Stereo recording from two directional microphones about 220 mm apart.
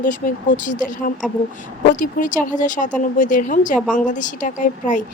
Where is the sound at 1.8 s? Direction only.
35° left (ahead or behind).